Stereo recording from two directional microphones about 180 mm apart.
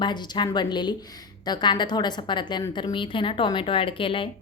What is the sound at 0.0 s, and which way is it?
A woman's voice, 25° left (ahead or behind).